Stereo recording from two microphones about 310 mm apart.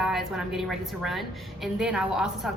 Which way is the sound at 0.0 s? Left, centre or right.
Centre.